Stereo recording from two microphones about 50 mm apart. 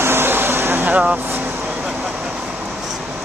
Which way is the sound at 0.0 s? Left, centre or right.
Right.